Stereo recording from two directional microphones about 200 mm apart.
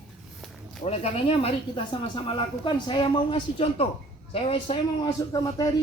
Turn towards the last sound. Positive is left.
turn(degrees=20)  # may be behind; listen again after turning